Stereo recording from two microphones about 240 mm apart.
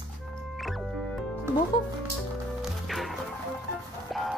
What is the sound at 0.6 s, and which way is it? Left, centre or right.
Music, centre.